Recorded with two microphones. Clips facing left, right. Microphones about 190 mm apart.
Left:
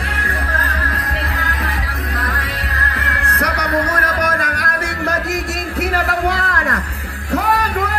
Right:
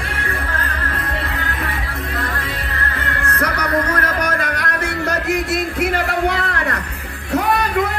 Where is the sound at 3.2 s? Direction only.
35° left (ahead or behind).